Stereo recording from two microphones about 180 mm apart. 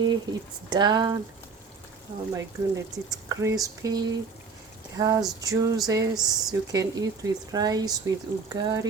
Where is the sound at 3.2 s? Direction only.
20° right (ahead or behind).